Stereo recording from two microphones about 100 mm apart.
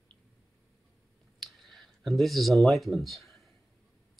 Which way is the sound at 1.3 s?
Centre (ahead or behind).